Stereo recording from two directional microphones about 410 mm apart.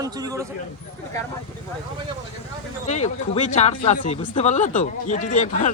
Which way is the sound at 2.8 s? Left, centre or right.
Centre.